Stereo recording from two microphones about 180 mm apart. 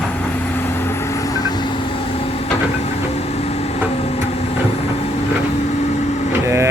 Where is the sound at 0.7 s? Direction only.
15° left (ahead or behind).